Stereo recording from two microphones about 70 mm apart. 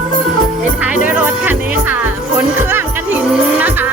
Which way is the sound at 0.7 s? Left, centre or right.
Right.